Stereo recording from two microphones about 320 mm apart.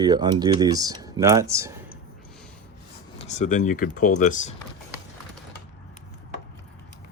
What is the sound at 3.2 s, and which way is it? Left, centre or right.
Speech, left.